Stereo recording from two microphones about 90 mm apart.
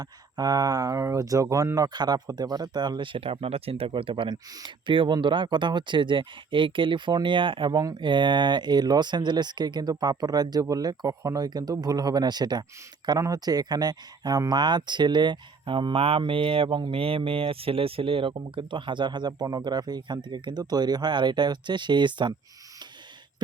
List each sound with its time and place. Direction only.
0.0 s speech: 45° right (ahead or behind); by 4.4 s 75° right (ahead or behind)
4.5 s speech: 65° right (ahead or behind); by 11.4 s 40° right (ahead or behind)
11.4 s speech: 50° right (ahead or behind)
13.1 s speech: 40° right (ahead or behind); by 22.4 s 60° right (ahead or behind)